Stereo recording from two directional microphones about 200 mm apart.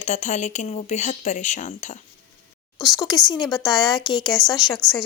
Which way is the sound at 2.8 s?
Centre (ahead or behind).